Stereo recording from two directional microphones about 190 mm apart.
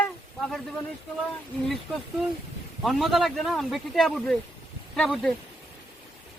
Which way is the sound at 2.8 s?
Centre (ahead or behind).